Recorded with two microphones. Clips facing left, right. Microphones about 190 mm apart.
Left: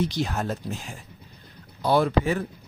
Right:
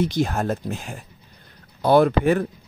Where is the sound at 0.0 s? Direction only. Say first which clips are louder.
Right 4 dB; 50° right (ahead or behind).